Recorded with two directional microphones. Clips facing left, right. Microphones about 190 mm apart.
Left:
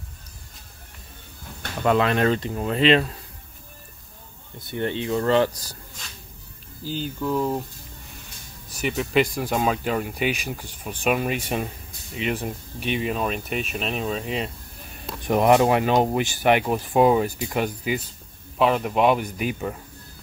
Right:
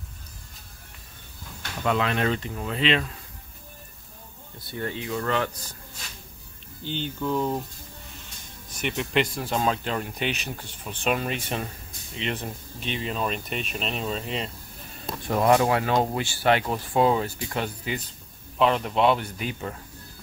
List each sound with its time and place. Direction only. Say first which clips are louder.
1.6 s speech: left 5 dB; 45° left (ahead or behind)
4.6 s speech: left 5 dB; 25° left (ahead or behind)
6.8 s speech: left 2 dB; 5° left (ahead or behind)
8.8 s speech: left 4 dB; 5° left (ahead or behind)
15.2 s speech: left 3 dB; 20° left (ahead or behind)